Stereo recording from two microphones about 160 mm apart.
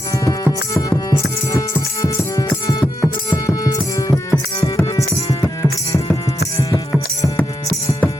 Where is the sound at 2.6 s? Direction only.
20° left (ahead or behind).